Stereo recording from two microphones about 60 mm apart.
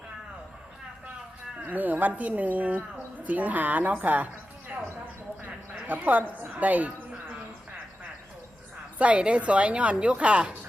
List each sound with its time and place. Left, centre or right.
1.7 s a woman's voice: right
5.9 s a woman's voice: right
9.0 s a woman's voice: right